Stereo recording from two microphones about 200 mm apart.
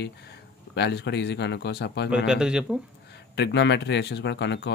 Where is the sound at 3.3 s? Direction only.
55° left (ahead or behind).